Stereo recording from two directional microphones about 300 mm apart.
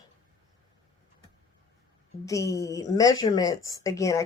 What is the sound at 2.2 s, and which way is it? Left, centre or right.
A woman's voice, centre.